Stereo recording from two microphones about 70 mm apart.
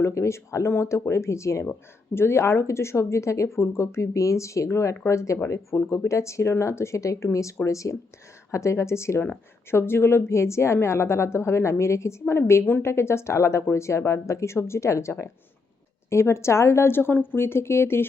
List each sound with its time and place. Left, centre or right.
0.0 s speech: left